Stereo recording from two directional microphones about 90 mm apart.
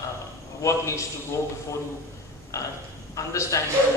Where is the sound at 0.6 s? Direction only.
35° left (ahead or behind).